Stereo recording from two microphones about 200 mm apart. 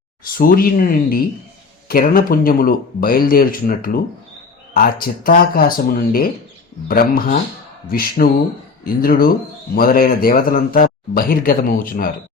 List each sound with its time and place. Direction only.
0.3 s speech: 45° left (ahead or behind)